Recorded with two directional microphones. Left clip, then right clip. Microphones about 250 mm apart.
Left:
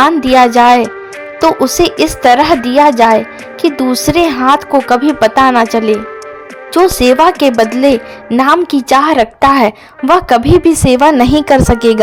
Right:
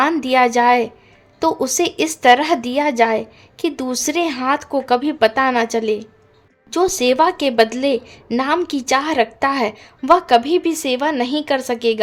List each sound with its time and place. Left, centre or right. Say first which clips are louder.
0.0 s a woman's voice: left 8 dB; centre